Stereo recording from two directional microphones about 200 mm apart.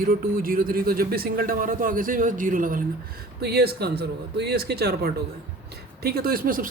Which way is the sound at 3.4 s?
55° right (ahead or behind).